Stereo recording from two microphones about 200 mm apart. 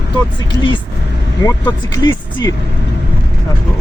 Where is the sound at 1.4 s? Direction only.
20° left (ahead or behind).